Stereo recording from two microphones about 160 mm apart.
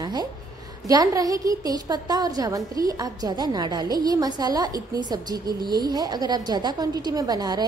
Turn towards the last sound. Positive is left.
turn(degrees=-25)  # may be behind; listen again after turning